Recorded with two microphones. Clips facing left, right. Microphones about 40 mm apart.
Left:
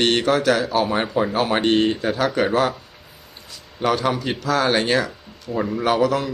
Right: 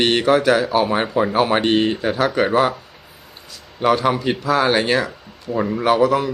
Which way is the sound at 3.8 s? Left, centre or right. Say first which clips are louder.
Right 4 dB; centre.